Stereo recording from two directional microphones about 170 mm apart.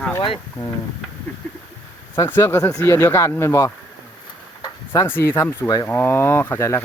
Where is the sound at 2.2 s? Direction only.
15° left (ahead or behind).